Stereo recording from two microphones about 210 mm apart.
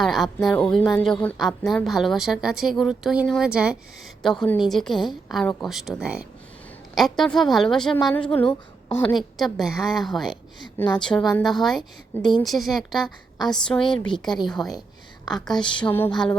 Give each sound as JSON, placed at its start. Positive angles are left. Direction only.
{"t": 0.0, "sound": "a woman's voice", "side_deg": 0}
{"t": 8.3, "sound": "a woman's voice", "side_deg": 25}
{"t": 9.1, "sound": "a woman's voice", "side_deg": 0}
{"t": 15.8, "sound": "a sound", "side_deg": 10}